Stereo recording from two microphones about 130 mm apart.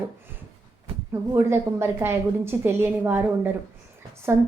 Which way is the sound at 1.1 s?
20° right (ahead or behind).